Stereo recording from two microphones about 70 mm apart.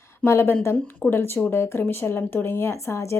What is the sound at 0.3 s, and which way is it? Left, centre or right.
Speech, left.